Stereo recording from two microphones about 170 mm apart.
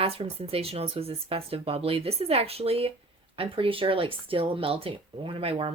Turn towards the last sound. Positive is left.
turn(degrees=-35)  # may be behind; listen again after turning